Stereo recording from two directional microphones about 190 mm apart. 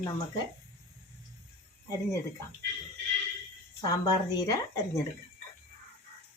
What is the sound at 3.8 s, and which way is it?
A woman's voice, 20° left (ahead or behind).